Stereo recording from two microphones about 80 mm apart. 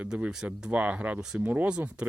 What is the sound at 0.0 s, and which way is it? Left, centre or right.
Speech, centre.